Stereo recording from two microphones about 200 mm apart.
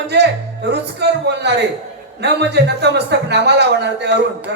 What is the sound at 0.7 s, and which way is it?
A man's voice, 60° right (ahead or behind).